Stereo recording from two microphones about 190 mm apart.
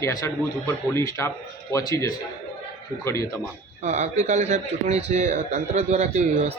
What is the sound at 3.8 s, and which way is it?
A man's voice, 40° right (ahead or behind).